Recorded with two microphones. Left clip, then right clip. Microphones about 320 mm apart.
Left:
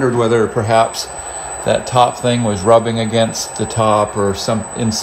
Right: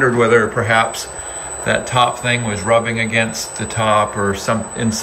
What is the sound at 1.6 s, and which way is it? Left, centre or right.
Speech, left.